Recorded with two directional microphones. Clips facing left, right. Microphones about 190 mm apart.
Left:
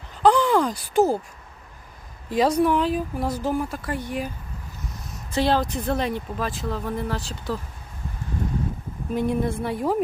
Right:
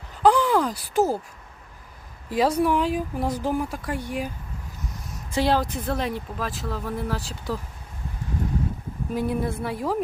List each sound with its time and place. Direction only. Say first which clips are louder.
0.2 s speech: left 1 dB; 5° right (ahead or behind)
2.3 s speech: left 1 dB; 5° right (ahead or behind)
5.3 s speech: left 1 dB; 10° right (ahead or behind)
9.1 s speech: left 2 dB; 5° right (ahead or behind)